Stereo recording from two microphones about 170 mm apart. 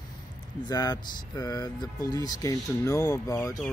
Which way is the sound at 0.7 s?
20° left (ahead or behind).